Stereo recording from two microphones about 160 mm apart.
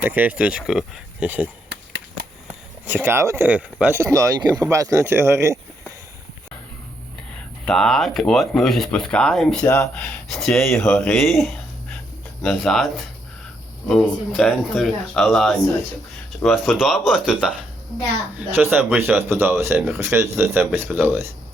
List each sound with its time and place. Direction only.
0.0 s speech: 10° right (ahead or behind)
2.8 s speech: 15° right (ahead or behind)
7.6 s speech: 5° left (ahead or behind)
9.6 s speech: 15° left (ahead or behind)
9.9 s speech: centre (ahead or behind)
18.5 s speech: 15° right (ahead or behind)